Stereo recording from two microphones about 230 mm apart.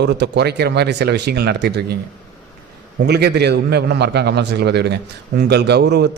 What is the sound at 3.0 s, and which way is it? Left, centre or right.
A man's voice, right.